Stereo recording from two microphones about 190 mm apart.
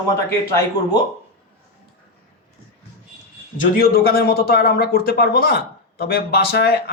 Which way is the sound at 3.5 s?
45° left (ahead or behind).